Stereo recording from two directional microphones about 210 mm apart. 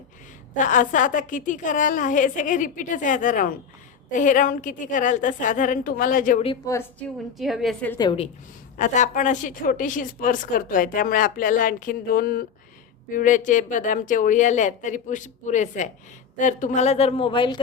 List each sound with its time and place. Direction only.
0.5 s a woman's voice: 35° left (ahead or behind)
7.3 s a woman's voice: centre (ahead or behind)
7.9 s a woman's voice: 25° left (ahead or behind)
8.8 s a woman's voice: 35° left (ahead or behind)